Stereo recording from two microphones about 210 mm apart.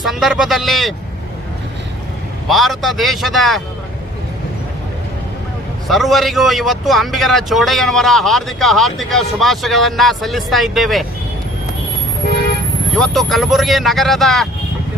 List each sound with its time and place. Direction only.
0.0 s a man's voice: centre (ahead or behind)
2.5 s a man's voice: centre (ahead or behind)
5.9 s a man's voice: centre (ahead or behind)
13.0 s a man's voice: centre (ahead or behind)